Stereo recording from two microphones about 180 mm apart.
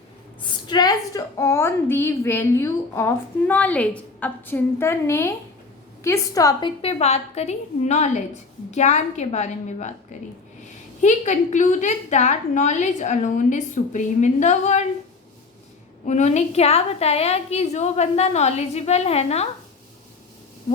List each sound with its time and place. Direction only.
0.7 s a woman's voice: 20° left (ahead or behind); by 14.8 s 40° left (ahead or behind)
16.0 s a woman's voice: 40° left (ahead or behind)
20.7 s hoot: 35° left (ahead or behind)